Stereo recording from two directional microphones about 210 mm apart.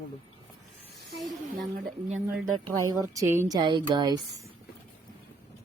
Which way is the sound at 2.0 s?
35° right (ahead or behind).